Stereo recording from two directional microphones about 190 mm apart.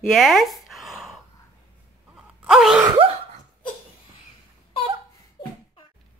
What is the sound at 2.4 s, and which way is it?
Wail, centre (ahead or behind).